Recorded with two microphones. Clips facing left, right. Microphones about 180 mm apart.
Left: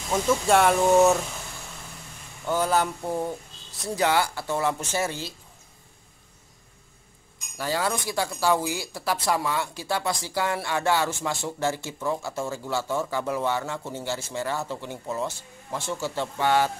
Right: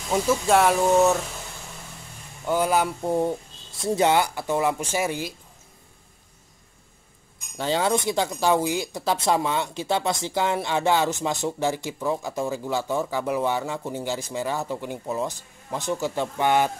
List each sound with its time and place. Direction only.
0.1 s speech: 5° right (ahead or behind)
2.4 s speech: 10° right (ahead or behind)
3.0 s speech: 25° right (ahead or behind)
7.5 s speech: 25° right (ahead or behind)